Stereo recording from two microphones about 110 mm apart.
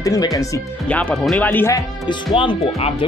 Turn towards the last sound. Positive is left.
turn(degrees=50)  # may be behind; listen again after turning